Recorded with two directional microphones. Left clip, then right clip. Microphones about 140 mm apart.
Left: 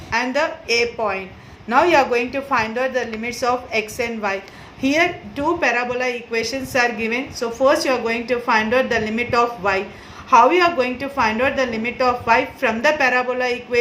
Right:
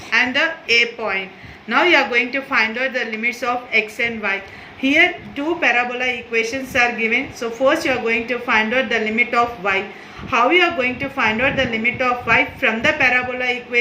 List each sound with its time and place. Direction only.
0.1 s a woman's voice: 40° left (ahead or behind)
5.5 s a woman's voice: 40° left (ahead or behind)